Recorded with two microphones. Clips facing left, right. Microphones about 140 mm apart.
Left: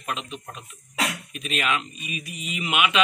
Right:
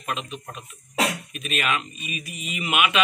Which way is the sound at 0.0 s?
15° right (ahead or behind).